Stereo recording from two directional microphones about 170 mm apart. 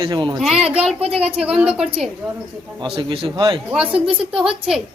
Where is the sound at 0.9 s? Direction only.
35° right (ahead or behind).